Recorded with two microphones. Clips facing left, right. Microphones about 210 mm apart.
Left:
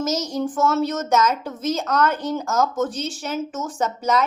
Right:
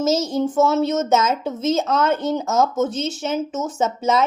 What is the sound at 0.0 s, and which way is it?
A woman's voice, 25° right (ahead or behind).